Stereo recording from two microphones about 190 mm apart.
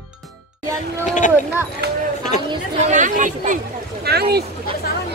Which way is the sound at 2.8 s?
40° right (ahead or behind).